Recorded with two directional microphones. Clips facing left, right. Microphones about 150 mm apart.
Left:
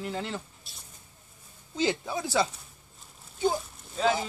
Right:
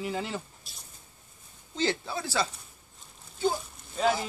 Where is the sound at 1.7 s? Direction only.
15° left (ahead or behind).